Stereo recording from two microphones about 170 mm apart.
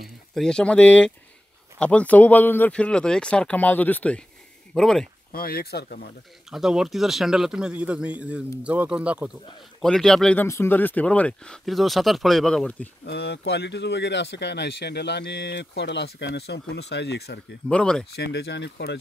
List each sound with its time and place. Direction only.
0.3 s speech: 5° left (ahead or behind)
5.3 s speech: 65° left (ahead or behind)
6.5 s speech: centre (ahead or behind)
9.8 s speech: 5° left (ahead or behind)
13.0 s speech: 75° left (ahead or behind)
17.6 s speech: 5° left (ahead or behind)
18.1 s speech: 75° left (ahead or behind)